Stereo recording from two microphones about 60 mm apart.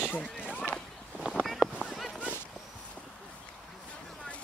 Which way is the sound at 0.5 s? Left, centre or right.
Left.